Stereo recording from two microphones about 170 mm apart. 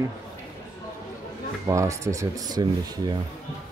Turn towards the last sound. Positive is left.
turn(degrees=-25)  # may be behind; listen again after turning